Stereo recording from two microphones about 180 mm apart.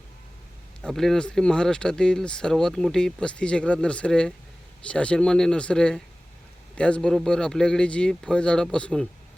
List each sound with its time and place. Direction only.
0.8 s speech: centre (ahead or behind)